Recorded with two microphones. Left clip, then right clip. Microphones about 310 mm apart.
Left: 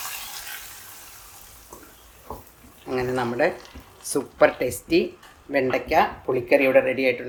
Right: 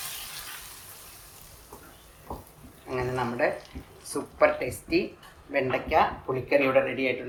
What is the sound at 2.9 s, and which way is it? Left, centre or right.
Speech, left.